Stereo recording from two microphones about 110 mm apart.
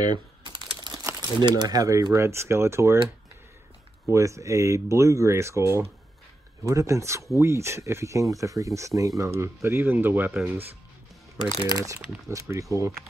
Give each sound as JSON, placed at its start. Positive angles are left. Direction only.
{"t": 0.0, "sound": "typing", "side_deg": -45}
{"t": 1.4, "sound": "speech", "side_deg": -35}
{"t": 4.1, "sound": "speech", "side_deg": -30}
{"t": 11.6, "sound": "speech", "side_deg": -30}